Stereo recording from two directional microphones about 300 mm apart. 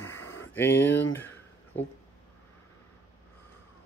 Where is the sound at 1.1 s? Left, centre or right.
Centre.